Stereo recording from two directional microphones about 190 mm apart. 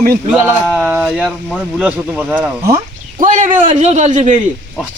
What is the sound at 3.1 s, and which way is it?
Speech, 40° right (ahead or behind).